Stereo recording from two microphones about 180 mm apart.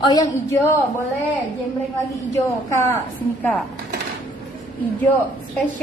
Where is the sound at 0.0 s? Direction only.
20° left (ahead or behind).